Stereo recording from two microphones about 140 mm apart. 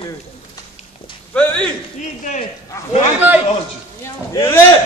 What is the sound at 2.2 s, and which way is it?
Speech, 65° left (ahead or behind).